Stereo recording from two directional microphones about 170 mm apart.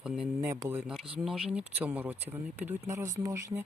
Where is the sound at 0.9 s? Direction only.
5° right (ahead or behind).